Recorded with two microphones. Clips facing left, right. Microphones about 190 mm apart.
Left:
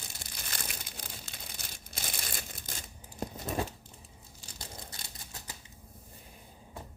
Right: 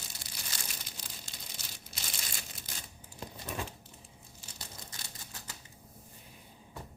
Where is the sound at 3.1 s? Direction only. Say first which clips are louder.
Left 6 dB; 40° left (ahead or behind).